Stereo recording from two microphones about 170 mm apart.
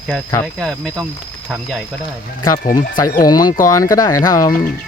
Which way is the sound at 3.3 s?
25° left (ahead or behind).